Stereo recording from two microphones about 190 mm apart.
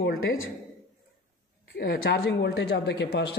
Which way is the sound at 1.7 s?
55° left (ahead or behind).